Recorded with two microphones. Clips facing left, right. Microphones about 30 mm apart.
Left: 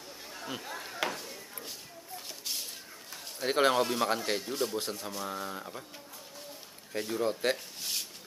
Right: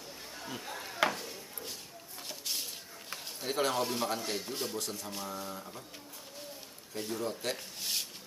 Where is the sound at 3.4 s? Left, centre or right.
Left.